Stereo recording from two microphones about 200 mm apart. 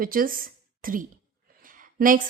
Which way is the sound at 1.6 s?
45° right (ahead or behind).